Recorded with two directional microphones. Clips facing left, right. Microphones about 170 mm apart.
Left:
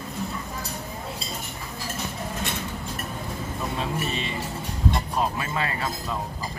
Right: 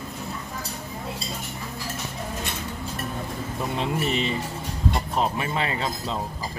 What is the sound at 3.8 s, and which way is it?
Speech, 25° right (ahead or behind).